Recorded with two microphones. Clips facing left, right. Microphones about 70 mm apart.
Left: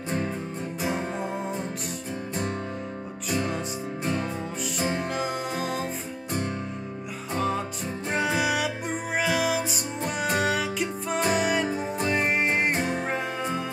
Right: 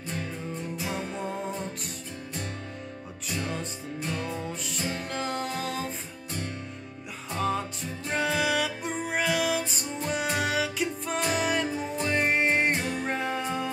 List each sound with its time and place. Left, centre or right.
0.7 s music: left
4.0 s music: left
5.1 s music: centre
7.3 s music: centre
11.7 s music: left
12.1 s music: centre
12.7 s music: left
13.0 s music: centre